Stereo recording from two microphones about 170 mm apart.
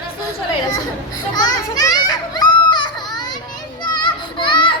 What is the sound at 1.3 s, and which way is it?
Children playing, 25° left (ahead or behind).